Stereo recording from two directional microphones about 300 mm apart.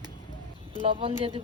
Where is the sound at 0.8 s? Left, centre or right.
Centre.